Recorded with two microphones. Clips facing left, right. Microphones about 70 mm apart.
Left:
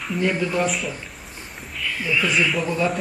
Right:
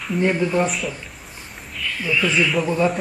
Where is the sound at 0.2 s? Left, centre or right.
Centre.